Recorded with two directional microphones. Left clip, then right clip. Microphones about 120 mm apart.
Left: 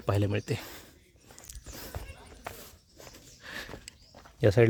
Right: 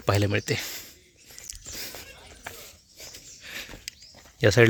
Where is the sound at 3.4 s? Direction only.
45° left (ahead or behind).